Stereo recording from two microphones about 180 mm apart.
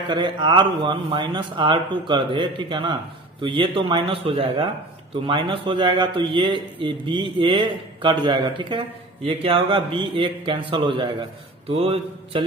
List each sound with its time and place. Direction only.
0.1 s a man's voice: 25° right (ahead or behind)